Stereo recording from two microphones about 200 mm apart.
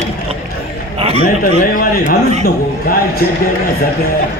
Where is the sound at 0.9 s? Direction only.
30° right (ahead or behind).